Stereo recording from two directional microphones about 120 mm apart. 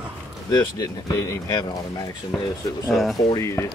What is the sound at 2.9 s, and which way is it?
Speech, centre (ahead or behind).